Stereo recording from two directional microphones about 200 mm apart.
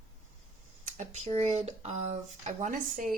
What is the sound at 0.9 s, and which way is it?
Speech, 35° right (ahead or behind).